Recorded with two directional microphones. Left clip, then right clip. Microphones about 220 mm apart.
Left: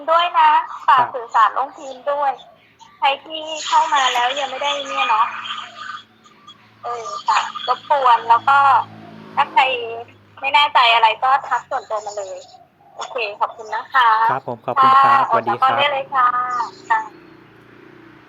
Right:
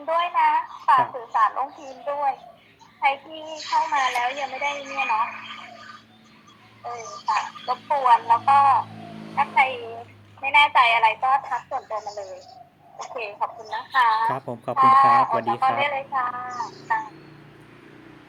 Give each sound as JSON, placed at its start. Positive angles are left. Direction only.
{"t": 0.0, "sound": "a woman's voice", "side_deg": 20}